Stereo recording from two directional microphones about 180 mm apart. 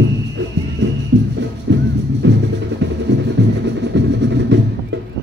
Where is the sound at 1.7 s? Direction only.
90° right.